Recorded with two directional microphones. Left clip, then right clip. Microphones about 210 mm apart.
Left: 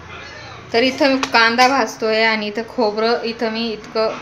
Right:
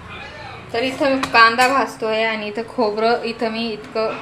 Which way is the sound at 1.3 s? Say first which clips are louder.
Right 2 dB; 15° left (ahead or behind).